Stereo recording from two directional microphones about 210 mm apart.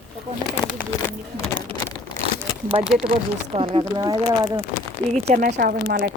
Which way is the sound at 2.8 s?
5° right (ahead or behind).